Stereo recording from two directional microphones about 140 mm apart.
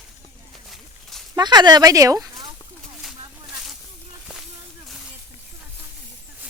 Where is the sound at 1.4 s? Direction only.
30° right (ahead or behind).